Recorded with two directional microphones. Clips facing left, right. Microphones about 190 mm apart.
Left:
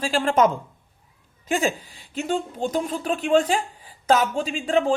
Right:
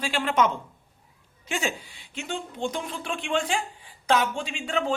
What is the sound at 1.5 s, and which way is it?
Speech, 35° left (ahead or behind).